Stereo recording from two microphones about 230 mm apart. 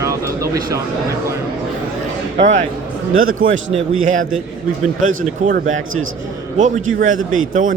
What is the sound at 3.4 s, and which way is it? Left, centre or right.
Speech, right.